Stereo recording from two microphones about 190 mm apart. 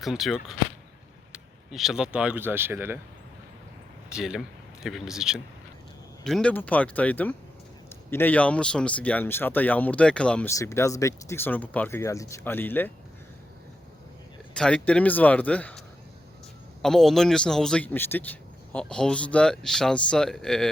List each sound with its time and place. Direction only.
0.0 s a man's voice: centre (ahead or behind)
4.1 s speech: 5° right (ahead or behind)
14.5 s speech: 5° left (ahead or behind)
16.8 s a man's voice: centre (ahead or behind)